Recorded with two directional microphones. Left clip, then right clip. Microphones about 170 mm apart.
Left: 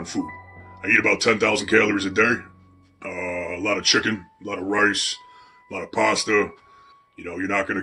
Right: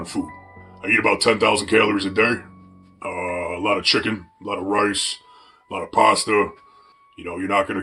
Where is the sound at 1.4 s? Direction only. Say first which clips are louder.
Right 1 dB; 20° left (ahead or behind).